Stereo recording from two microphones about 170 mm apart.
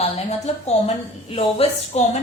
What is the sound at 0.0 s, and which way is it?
A woman's voice, 40° left (ahead or behind).